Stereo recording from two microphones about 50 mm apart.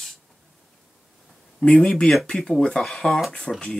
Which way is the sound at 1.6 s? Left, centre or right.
Left.